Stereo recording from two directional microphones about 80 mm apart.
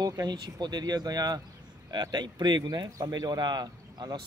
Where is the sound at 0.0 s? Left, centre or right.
Right.